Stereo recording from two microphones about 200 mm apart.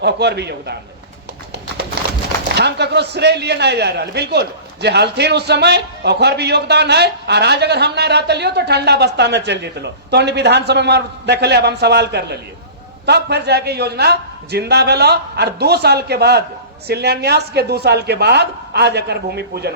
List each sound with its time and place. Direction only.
0.0 s speech: 55° right (ahead or behind)
2.6 s speech: 55° right (ahead or behind)